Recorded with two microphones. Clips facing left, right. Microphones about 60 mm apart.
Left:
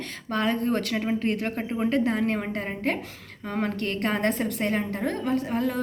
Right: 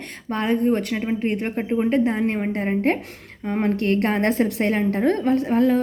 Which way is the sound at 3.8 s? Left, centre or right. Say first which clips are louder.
Right 6 dB; right.